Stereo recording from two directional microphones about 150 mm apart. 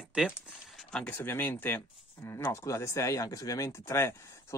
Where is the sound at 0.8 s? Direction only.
5° left (ahead or behind).